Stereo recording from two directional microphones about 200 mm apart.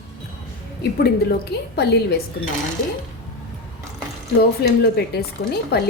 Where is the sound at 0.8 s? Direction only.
50° left (ahead or behind).